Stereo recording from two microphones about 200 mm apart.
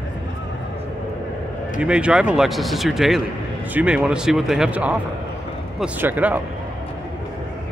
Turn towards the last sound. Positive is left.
turn(degrees=-10)  # may be behind; listen again after turning